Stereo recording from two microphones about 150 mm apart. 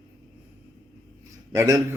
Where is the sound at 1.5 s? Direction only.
25° right (ahead or behind).